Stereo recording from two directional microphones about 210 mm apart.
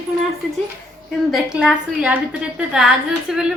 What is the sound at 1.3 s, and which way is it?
A woman's voice, 5° right (ahead or behind).